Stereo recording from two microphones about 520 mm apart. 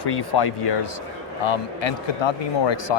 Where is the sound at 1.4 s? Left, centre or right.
Left.